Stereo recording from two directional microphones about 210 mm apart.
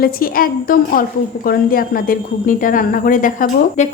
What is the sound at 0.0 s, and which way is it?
A woman's voice, 45° left (ahead or behind).